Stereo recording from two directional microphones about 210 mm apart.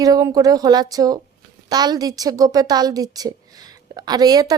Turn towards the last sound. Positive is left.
turn(degrees=-20)  # may be behind; listen again after turning